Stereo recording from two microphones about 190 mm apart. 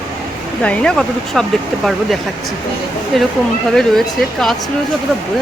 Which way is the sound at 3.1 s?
Centre (ahead or behind).